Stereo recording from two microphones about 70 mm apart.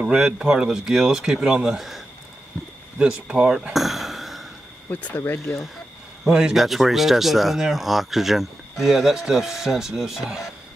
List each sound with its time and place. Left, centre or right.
0.0 s speech: centre
3.0 s a sound: centre
5.0 s speech: left
6.2 s speech: centre